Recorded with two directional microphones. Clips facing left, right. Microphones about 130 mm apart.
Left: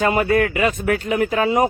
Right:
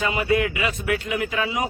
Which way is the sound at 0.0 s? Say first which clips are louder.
Left 5 dB; 50° left (ahead or behind).